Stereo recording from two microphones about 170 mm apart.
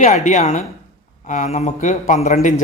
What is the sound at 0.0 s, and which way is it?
Speech, 45° left (ahead or behind).